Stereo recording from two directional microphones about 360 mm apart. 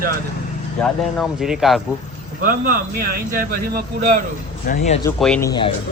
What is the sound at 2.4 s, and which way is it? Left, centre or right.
A man's voice, right.